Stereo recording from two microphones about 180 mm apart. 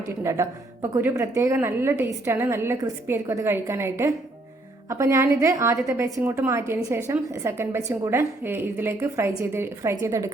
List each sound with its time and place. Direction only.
0.1 s a woman's voice: 15° right (ahead or behind)